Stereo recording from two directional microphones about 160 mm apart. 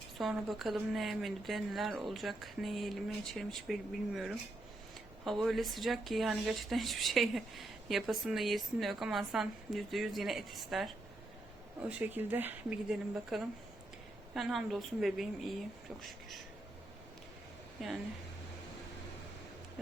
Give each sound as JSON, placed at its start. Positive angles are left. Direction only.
{"t": 0.2, "sound": "speech", "side_deg": 0}
{"t": 13.3, "sound": "speech", "side_deg": 0}